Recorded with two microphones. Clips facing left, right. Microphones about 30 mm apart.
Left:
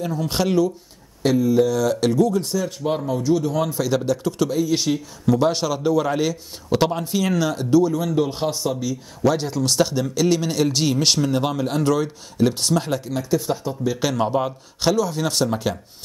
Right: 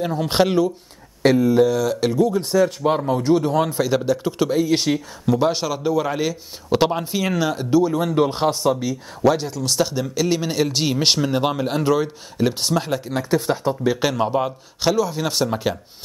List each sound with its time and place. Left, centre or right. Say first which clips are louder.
0.0 s a man's voice: right 4 dB; right
1.2 s speech: right 2 dB; right
1.8 s speech: left 1 dB; centre
2.2 s a man's voice: right 4 dB; right
3.8 s a man's voice: right 1 dB; centre; by 5.0 s right
5.2 s speech: left 1 dB; centre
8.1 s speech: right 3 dB; right
8.5 s a man's voice: right 4 dB; right
9.6 s speech: left 1 dB; centre
13.1 s speech: right 3 dB; right
13.9 s speech: right 1 dB; centre